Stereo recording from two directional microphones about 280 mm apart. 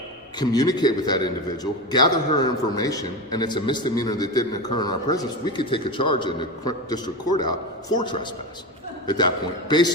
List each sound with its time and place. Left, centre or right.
0.3 s a man's voice: centre